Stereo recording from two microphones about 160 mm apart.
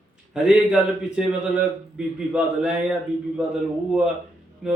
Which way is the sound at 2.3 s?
5° right (ahead or behind).